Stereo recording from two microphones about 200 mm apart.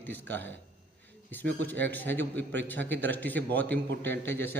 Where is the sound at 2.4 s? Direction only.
10° left (ahead or behind).